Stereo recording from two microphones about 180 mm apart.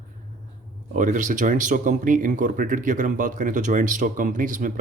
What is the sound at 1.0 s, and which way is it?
Speech, 45° right (ahead or behind).